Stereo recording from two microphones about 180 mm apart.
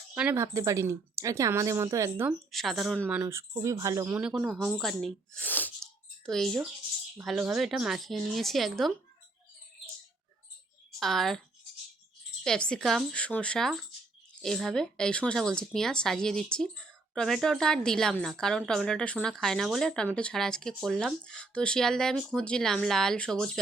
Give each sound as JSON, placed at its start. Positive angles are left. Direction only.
{"t": 0.1, "sound": "speech", "side_deg": -5}
{"t": 0.3, "sound": "speech", "side_deg": -15}
{"t": 2.5, "sound": "speech", "side_deg": 0}
{"t": 4.2, "sound": "speech", "side_deg": -5}
{"t": 11.0, "sound": "speech", "side_deg": 0}
{"t": 12.4, "sound": "speech", "side_deg": 5}